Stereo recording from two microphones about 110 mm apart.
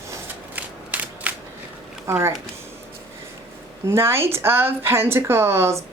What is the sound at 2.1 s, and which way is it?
Speech, 25° right (ahead or behind).